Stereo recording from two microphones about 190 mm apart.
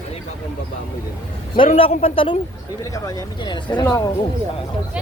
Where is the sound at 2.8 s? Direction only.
20° left (ahead or behind).